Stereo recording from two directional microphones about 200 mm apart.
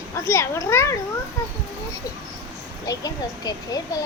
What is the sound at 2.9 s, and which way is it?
Speech, 20° left (ahead or behind).